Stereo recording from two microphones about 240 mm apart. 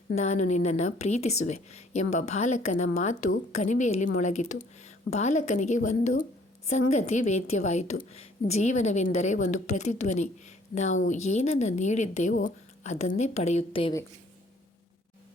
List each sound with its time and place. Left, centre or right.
0.2 s a woman's voice: left